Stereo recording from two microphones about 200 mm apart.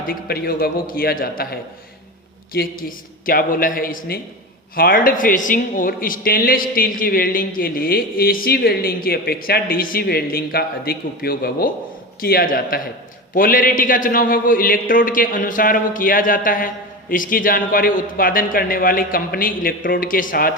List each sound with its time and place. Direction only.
0.1 s a man's voice: 50° left (ahead or behind)
2.5 s a man's voice: 50° left (ahead or behind)